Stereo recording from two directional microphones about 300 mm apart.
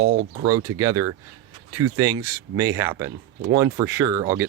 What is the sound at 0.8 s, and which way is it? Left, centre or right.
Speech, centre.